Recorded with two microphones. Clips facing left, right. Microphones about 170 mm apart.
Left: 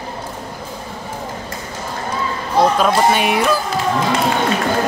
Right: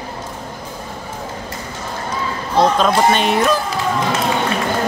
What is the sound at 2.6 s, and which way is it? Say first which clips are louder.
Speech: even; 5° left (ahead or behind).